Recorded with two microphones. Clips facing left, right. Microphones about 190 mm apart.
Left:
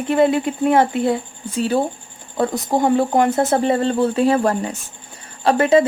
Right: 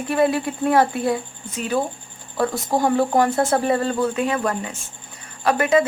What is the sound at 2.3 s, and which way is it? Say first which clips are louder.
Speech: left 2 dB; 20° left (ahead or behind).